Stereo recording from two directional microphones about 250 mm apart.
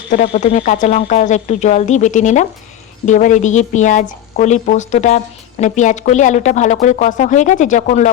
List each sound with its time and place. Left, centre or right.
0.1 s a woman's voice: left